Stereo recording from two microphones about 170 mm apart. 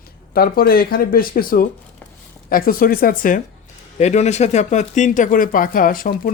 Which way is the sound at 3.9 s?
40° left (ahead or behind).